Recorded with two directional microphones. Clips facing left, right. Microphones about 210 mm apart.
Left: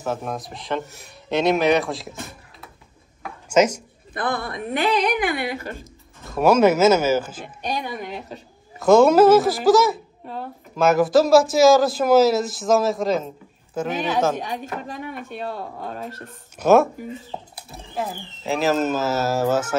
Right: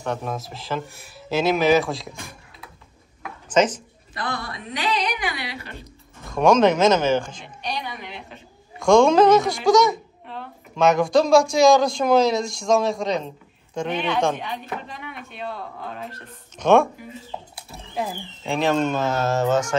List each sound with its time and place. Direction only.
0.0 s a man's voice: centre (ahead or behind)
3.4 s speech: 10° left (ahead or behind)
4.1 s speech: 55° left (ahead or behind)
6.3 s speech: 5° left (ahead or behind)
7.4 s speech: 50° left (ahead or behind)
8.7 s a man's voice: 5° left (ahead or behind)
10.2 s a sound: 40° left (ahead or behind)
10.8 s a man's voice: 5° left (ahead or behind)
14.3 s speech: 45° left (ahead or behind)
16.1 s a man's voice: 5° left (ahead or behind)